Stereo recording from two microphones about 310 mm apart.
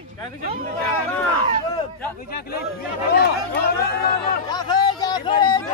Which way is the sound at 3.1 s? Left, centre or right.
Left.